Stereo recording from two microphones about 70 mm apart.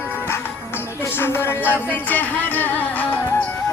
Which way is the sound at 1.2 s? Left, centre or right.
Left.